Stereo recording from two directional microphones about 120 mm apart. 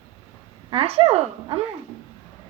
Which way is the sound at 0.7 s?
55° right (ahead or behind).